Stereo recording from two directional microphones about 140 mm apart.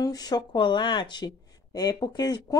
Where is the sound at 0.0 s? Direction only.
25° left (ahead or behind).